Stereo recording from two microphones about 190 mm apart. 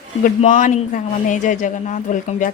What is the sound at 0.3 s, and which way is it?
Speech, 40° left (ahead or behind).